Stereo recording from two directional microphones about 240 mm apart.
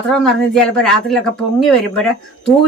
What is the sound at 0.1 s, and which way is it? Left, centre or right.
A man's voice, centre.